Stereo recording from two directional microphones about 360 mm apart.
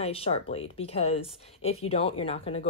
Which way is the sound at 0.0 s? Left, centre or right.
Centre.